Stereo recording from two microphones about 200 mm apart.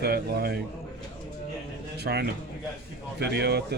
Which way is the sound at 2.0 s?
55° right (ahead or behind).